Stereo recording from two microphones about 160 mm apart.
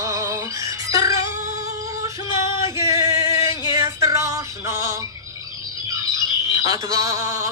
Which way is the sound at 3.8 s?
20° right (ahead or behind).